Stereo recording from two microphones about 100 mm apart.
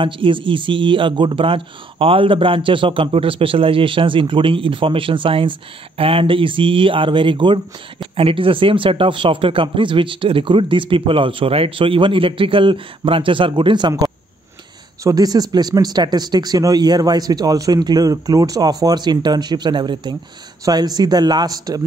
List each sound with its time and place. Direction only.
0.0 s a man's voice: 55° right (ahead or behind); by 21.8 s 40° right (ahead or behind)